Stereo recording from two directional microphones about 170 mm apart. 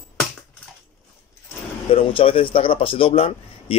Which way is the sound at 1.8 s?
30° left (ahead or behind).